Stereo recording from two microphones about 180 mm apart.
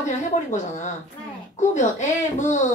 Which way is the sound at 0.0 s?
45° left (ahead or behind).